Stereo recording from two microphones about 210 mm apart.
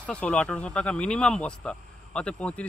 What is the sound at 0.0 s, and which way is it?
Speech, 5° left (ahead or behind).